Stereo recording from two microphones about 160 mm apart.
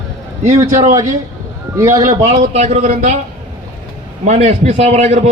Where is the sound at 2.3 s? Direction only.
40° right (ahead or behind).